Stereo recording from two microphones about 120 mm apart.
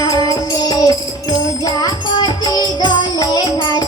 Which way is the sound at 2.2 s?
35° left (ahead or behind).